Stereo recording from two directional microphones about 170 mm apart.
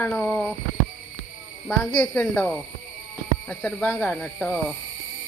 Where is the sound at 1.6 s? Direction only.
10° left (ahead or behind).